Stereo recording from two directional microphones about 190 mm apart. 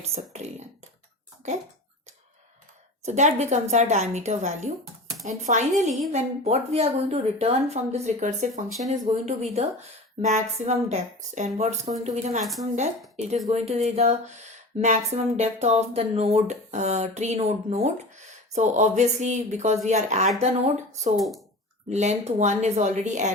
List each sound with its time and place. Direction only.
0.0 s speech: 35° right (ahead or behind)
3.1 s speech: 35° right (ahead or behind)
21.2 s speech: centre (ahead or behind)
21.8 s speech: 35° right (ahead or behind)